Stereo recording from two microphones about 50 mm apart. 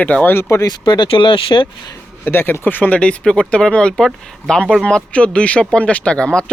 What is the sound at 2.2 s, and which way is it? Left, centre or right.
Speech, left.